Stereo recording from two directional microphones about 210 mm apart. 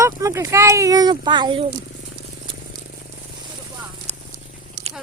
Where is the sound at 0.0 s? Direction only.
15° right (ahead or behind).